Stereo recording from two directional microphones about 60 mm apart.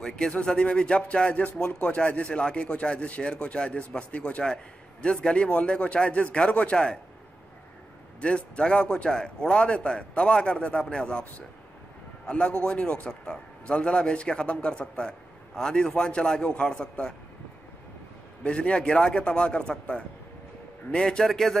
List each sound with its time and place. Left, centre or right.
0.0 s speech: centre
8.2 s a man's voice: centre
12.3 s a man's voice: centre
18.4 s a man's voice: centre